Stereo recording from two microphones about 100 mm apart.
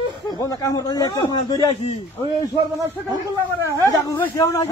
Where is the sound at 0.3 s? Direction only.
35° left (ahead or behind).